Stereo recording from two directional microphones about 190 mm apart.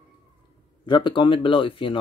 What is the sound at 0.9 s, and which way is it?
Speech, 25° left (ahead or behind).